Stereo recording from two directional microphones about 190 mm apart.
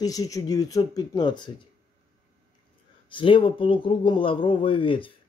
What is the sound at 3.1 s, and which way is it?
Speech, 25° left (ahead or behind).